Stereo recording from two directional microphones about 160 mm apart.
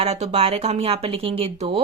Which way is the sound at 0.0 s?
40° right (ahead or behind).